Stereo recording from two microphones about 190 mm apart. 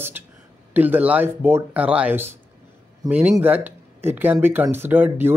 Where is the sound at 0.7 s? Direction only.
10° right (ahead or behind).